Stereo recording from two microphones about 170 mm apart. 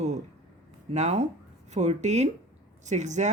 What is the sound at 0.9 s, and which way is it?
Speech, 40° right (ahead or behind).